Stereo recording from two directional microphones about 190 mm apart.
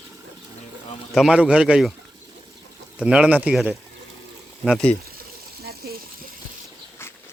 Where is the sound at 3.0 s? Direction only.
5° right (ahead or behind).